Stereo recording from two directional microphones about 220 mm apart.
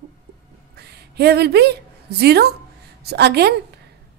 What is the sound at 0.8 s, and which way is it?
A woman's voice, 50° right (ahead or behind).